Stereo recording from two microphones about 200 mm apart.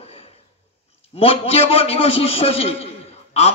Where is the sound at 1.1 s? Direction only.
30° left (ahead or behind).